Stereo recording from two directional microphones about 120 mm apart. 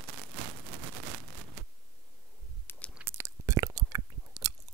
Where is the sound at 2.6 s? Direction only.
15° left (ahead or behind).